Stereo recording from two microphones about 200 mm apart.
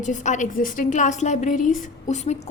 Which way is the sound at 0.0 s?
40° left (ahead or behind).